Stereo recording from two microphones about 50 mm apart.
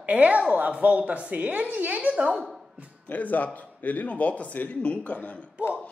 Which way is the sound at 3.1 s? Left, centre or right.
Left.